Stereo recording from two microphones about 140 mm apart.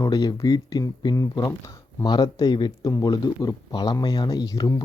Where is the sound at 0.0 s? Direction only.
25° left (ahead or behind).